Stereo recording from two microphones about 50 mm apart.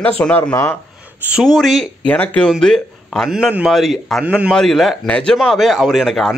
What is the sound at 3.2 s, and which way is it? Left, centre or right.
Speech, centre.